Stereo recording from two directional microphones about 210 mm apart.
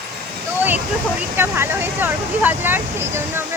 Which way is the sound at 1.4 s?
10° right (ahead or behind).